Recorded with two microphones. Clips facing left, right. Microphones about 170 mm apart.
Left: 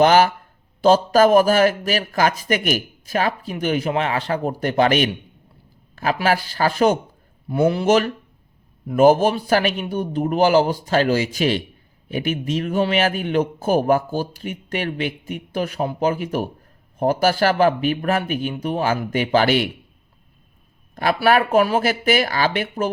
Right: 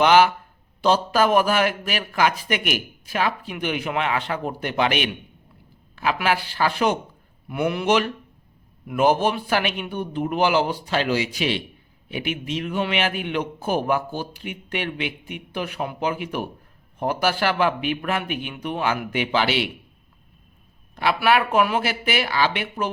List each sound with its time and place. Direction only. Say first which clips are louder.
0.0 s a man's voice: left 2 dB; 40° left (ahead or behind)
20.9 s speech: left 3 dB; 45° left (ahead or behind)